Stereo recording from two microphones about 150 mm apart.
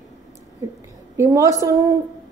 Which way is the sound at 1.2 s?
20° right (ahead or behind).